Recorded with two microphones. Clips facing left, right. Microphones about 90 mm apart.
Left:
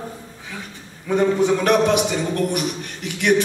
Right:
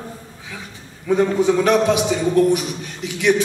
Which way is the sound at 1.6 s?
55° left (ahead or behind).